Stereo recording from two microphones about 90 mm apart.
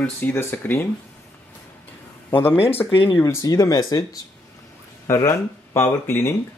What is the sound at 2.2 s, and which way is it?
Speech, 25° left (ahead or behind).